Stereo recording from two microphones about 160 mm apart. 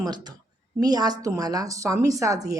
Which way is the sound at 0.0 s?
25° right (ahead or behind).